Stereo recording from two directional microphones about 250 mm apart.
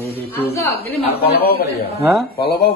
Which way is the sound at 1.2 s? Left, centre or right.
Left.